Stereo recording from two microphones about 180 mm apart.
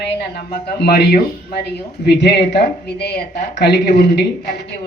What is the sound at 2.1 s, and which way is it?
Speech, 70° left (ahead or behind).